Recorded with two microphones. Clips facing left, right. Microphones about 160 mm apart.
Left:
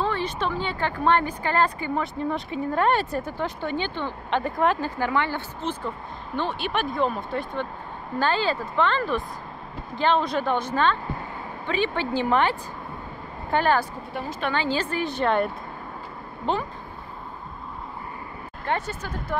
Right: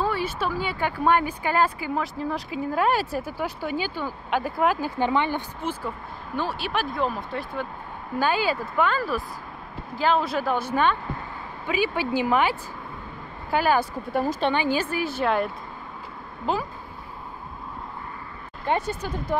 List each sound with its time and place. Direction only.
0.0 s speech: 10° right (ahead or behind)
4.9 s speech: 20° right (ahead or behind)
14.1 s a woman's voice: 45° right (ahead or behind)
14.5 s speech: 15° right (ahead or behind)
18.7 s speech: 15° right (ahead or behind)